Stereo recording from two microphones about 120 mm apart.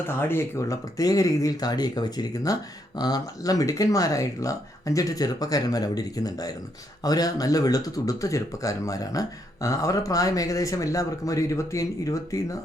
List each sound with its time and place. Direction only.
0.1 s speech: 20° left (ahead or behind)